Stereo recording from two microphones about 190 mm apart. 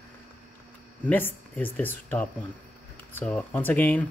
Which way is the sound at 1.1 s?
10° left (ahead or behind).